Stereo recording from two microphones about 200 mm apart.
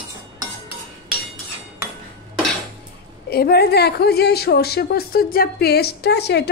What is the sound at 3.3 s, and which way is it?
A woman's voice, 50° left (ahead or behind).